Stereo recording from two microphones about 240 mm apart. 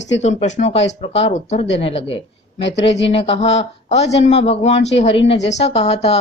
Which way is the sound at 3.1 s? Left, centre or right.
Left.